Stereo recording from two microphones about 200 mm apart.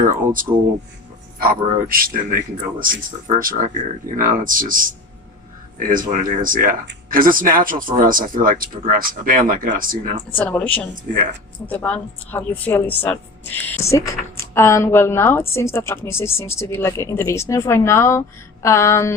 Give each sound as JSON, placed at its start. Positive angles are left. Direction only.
{"t": 0.0, "sound": "speech", "side_deg": -40}
{"t": 10.3, "sound": "a woman's voice", "side_deg": 10}